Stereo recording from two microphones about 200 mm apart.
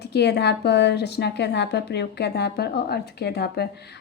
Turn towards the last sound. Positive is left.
turn(degrees=55)  # may be behind; listen again after turning